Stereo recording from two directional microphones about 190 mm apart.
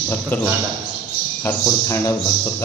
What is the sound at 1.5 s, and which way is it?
A man's voice, 15° left (ahead or behind).